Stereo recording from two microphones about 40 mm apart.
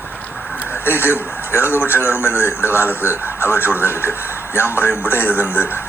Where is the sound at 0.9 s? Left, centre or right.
Left.